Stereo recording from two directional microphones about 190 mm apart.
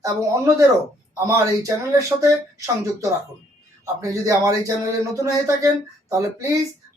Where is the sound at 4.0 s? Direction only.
15° right (ahead or behind).